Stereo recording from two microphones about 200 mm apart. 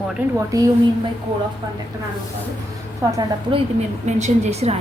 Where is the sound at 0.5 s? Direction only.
15° right (ahead or behind).